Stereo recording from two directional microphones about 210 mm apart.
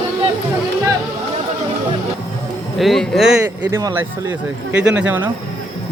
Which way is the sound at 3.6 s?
20° right (ahead or behind).